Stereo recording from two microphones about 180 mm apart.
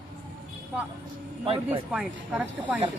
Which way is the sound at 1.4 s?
35° right (ahead or behind).